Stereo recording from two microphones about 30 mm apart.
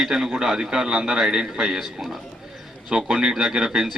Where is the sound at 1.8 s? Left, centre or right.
Centre.